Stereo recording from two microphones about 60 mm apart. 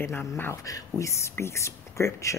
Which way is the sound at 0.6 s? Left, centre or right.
Left.